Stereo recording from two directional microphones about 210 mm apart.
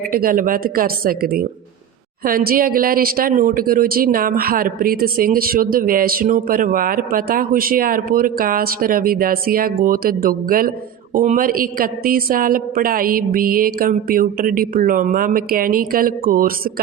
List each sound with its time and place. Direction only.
0.1 s a woman's voice: 40° right (ahead or behind)